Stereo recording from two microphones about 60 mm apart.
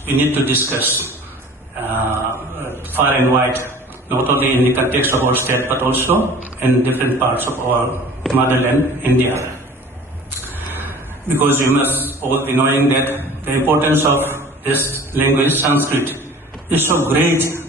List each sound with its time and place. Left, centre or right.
0.0 s a man's voice: right
10.8 s a man's voice: right